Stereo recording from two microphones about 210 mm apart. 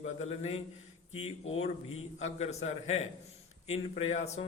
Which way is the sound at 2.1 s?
30° left (ahead or behind).